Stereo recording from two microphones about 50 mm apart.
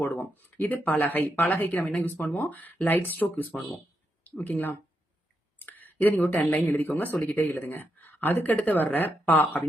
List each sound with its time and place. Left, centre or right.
0.0 s speech: left
5.5 s a sound: left
6.4 s speech: left
8.4 s speech: left